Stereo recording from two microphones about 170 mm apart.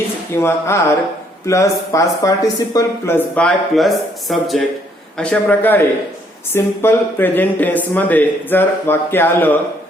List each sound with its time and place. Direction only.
0.3 s speech: 15° left (ahead or behind)